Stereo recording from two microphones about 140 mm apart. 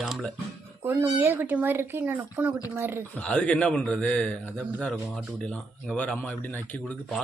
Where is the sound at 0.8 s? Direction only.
15° right (ahead or behind).